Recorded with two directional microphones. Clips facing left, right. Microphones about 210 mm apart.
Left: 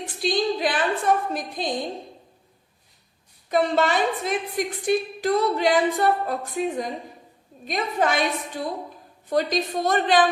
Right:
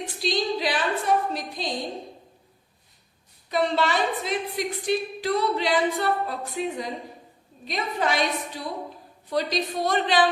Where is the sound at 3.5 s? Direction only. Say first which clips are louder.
Left 3 dB; 50° left (ahead or behind).